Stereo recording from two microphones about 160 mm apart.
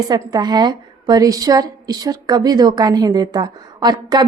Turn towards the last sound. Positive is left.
turn(degrees=-25)  # may be behind; listen again after turning